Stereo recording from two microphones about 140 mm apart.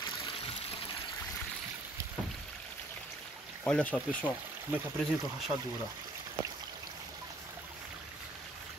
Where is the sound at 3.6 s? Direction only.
10° left (ahead or behind).